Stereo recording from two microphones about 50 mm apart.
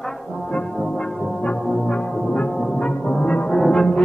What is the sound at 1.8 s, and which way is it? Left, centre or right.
Music, centre.